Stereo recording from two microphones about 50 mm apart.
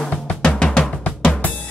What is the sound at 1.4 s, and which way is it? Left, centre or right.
Drum, left.